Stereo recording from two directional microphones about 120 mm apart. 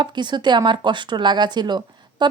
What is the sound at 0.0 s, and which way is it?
Speech, 40° right (ahead or behind).